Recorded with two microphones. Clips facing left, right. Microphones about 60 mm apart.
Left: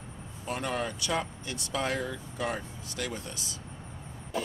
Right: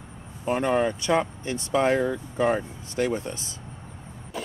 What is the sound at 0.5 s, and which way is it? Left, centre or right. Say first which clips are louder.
Speech: right 9 dB; right.